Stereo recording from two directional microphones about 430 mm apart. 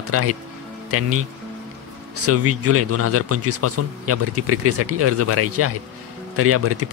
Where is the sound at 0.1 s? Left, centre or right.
Right.